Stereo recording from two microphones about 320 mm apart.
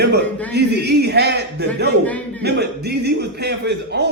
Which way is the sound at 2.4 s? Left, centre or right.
Right.